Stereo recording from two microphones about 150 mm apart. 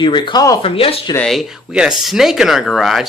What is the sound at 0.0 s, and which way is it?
Speech, 30° left (ahead or behind).